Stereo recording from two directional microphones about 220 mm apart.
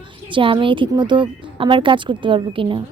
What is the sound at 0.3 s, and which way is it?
A woman's voice, 25° right (ahead or behind).